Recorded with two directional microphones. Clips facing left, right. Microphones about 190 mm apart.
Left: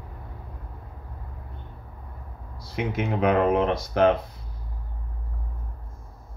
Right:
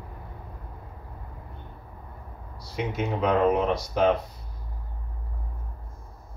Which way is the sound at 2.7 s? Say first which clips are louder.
Left 2 dB; 60° left (ahead or behind).